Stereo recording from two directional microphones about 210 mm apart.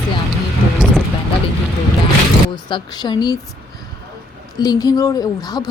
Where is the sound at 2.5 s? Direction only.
20° left (ahead or behind).